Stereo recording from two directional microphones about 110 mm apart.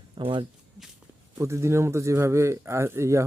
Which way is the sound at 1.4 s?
25° right (ahead or behind).